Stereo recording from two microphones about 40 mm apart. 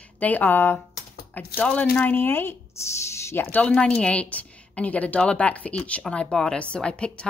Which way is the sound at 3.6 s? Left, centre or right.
Left.